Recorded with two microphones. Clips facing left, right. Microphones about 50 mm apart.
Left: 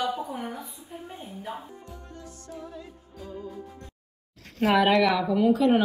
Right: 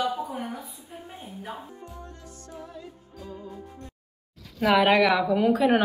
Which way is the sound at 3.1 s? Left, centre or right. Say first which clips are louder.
Left 1 dB; left.